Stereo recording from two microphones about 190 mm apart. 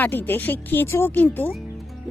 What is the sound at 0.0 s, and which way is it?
Speech, 10° left (ahead or behind).